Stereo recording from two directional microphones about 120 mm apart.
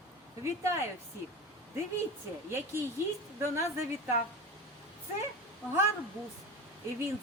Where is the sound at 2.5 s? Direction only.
20° right (ahead or behind).